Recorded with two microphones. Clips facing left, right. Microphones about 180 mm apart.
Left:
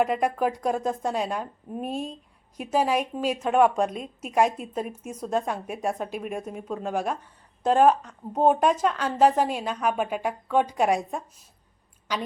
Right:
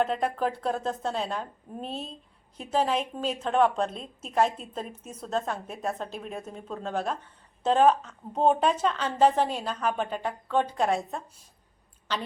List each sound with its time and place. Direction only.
0.0 s a woman's voice: 10° left (ahead or behind)